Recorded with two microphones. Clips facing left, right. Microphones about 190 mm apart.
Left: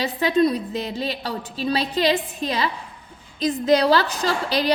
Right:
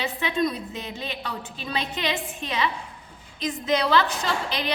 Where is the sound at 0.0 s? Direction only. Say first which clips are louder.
Left 6 dB; 35° left (ahead or behind).